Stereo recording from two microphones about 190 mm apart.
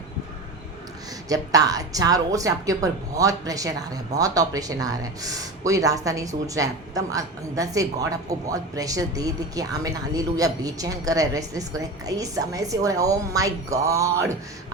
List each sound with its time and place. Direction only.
1.3 s a woman's voice: 20° right (ahead or behind)